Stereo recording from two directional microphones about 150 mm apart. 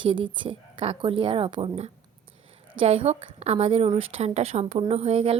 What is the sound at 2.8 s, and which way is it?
A woman's voice, 40° right (ahead or behind).